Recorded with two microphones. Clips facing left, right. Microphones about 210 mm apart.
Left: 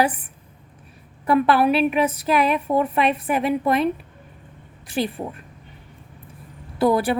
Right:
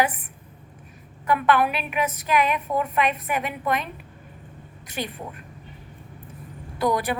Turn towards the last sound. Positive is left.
turn(degrees=30)  # may be behind; listen again after turning